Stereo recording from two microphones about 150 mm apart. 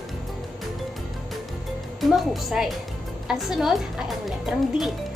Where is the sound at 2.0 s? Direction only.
Centre (ahead or behind).